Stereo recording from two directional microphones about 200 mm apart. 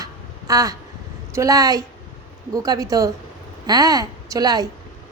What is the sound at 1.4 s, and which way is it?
A woman's voice, 15° right (ahead or behind).